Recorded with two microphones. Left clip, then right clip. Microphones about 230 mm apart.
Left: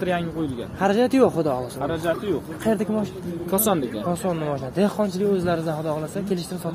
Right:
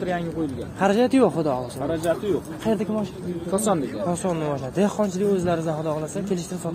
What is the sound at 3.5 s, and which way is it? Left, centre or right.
Speech, left.